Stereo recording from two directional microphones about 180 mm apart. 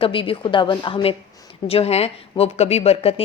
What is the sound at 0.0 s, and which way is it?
Speech, 30° left (ahead or behind).